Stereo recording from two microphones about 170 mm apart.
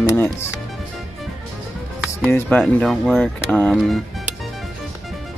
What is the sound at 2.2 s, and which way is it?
Speech, 15° left (ahead or behind).